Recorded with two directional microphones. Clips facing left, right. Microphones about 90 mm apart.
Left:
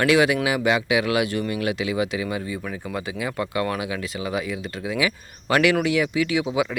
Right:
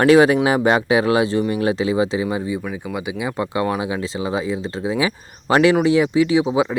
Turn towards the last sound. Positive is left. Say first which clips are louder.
# right 6 dB
turn(degrees=-30)  # may be behind; listen again after turning